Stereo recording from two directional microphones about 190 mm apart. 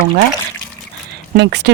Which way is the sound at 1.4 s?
60° right (ahead or behind).